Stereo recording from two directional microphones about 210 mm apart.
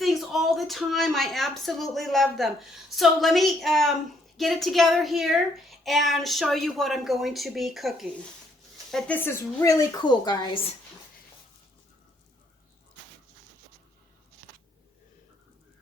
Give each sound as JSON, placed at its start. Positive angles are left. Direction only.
{"t": 0.0, "sound": "a woman's voice", "side_deg": 0}